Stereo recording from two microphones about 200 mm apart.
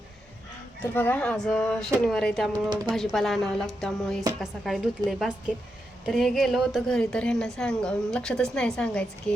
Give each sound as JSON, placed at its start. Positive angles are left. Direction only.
{"t": 0.8, "sound": "a woman's voice", "side_deg": 10}
{"t": 2.5, "sound": "speech", "side_deg": -20}
{"t": 2.9, "sound": "a woman's voice", "side_deg": 0}